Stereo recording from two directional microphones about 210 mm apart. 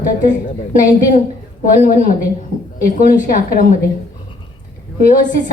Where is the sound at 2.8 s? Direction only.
40° left (ahead or behind).